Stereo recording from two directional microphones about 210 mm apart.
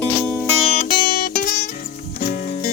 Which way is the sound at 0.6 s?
35° left (ahead or behind).